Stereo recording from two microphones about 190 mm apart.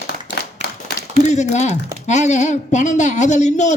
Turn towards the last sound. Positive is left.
turn(degrees=40)  # may be behind; listen again after turning